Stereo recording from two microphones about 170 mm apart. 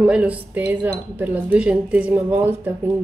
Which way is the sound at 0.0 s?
5° right (ahead or behind).